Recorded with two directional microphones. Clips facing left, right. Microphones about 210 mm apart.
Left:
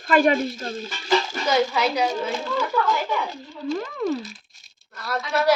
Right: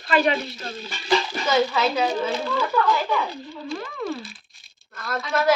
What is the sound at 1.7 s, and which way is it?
Speech, 10° left (ahead or behind).